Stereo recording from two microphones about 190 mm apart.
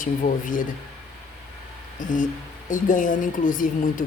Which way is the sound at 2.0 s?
45° left (ahead or behind).